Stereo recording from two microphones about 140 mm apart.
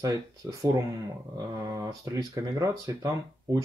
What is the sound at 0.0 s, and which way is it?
Speech, 25° right (ahead or behind).